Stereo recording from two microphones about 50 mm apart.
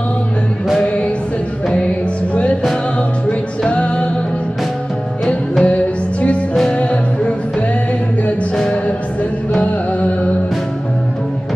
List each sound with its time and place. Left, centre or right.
3.3 s music: left
5.2 s music: centre
6.8 s music: left
9.6 s music: left